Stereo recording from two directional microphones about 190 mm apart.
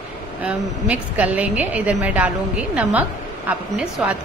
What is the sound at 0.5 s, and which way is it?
A woman's voice, 5° right (ahead or behind).